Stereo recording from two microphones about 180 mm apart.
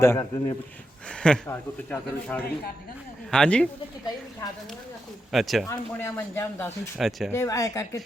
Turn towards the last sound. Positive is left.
turn(degrees=15)  # may be behind; listen again after turning